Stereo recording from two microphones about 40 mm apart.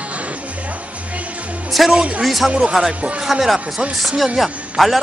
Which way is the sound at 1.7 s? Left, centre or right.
Centre.